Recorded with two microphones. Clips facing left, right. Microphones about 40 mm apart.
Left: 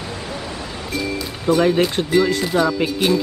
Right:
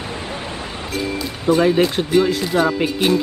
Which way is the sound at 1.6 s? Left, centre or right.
Centre.